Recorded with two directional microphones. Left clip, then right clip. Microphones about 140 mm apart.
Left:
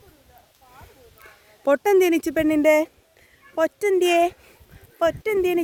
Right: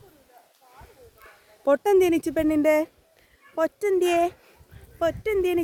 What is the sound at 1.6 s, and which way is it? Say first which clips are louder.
Speech: left 2 dB; 20° left (ahead or behind).